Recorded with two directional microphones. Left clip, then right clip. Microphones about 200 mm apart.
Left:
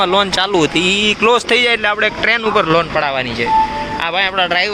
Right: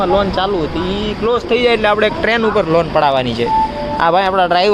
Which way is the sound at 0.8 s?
55° left (ahead or behind).